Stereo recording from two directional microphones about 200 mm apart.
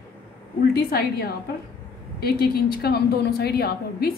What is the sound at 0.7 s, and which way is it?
A woman's voice, 50° left (ahead or behind).